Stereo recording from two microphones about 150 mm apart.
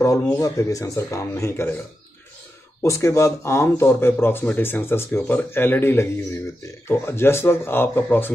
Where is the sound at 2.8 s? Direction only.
20° left (ahead or behind).